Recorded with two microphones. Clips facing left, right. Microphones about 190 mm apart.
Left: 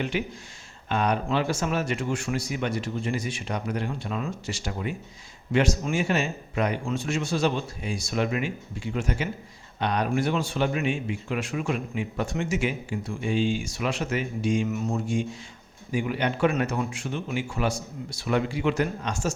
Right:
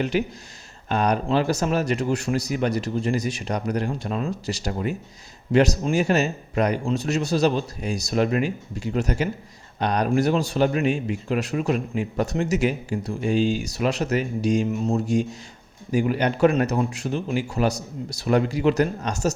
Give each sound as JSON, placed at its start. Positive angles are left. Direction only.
{"t": 0.0, "sound": "a man's voice", "side_deg": -40}